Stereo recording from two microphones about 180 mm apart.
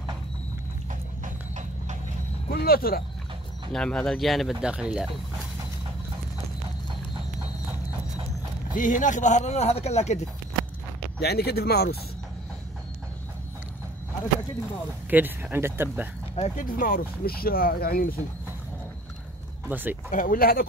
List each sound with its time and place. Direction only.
2.5 s speech: 55° left (ahead or behind)
3.7 s speech: 5° left (ahead or behind)
8.7 s speech: 45° left (ahead or behind)
11.1 s speech: 60° left (ahead or behind)
15.0 s speech: 10° right (ahead or behind)
16.3 s speech: 35° left (ahead or behind)
16.6 s speech: 50° left (ahead or behind)
19.7 s speech: 10° right (ahead or behind)
20.1 s speech: 50° left (ahead or behind)